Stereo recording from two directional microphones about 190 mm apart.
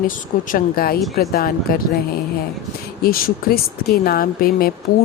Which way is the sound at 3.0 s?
50° left (ahead or behind).